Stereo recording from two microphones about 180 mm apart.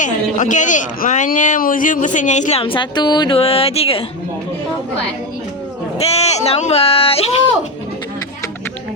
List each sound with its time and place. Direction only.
0.0 s speech: 45° left (ahead or behind)
6.1 s speech: 35° left (ahead or behind)